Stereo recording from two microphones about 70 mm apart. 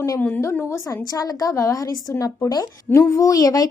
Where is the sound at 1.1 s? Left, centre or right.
Left.